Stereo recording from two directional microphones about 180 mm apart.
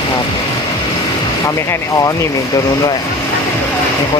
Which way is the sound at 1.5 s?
20° left (ahead or behind).